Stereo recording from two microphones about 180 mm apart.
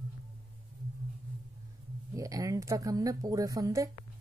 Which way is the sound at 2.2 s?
20° right (ahead or behind).